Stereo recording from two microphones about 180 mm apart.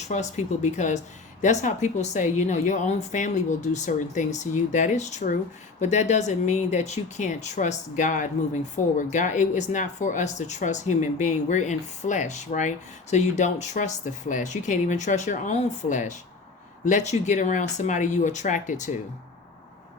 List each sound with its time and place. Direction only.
0.0 s speech: 40° left (ahead or behind)